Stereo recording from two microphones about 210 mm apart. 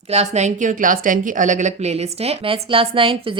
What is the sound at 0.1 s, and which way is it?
A woman's voice, 30° right (ahead or behind).